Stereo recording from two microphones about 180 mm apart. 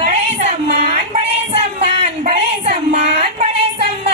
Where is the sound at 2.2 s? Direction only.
35° right (ahead or behind).